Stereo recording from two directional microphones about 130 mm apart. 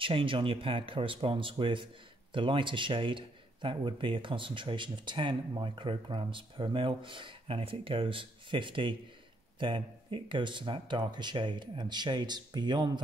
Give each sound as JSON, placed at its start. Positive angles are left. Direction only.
{"t": 0.0, "sound": "a man's voice", "side_deg": -40}